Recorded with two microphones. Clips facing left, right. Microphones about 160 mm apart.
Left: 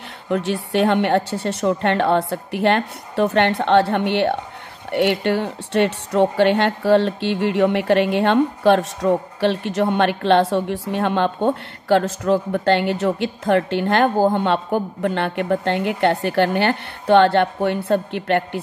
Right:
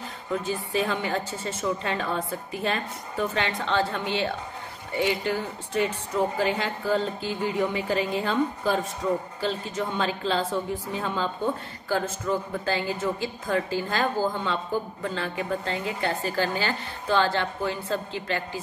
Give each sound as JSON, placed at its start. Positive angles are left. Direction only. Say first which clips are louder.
{"t": 0.3, "sound": "a woman's voice", "louder": "left 7 dB", "side_deg": 75}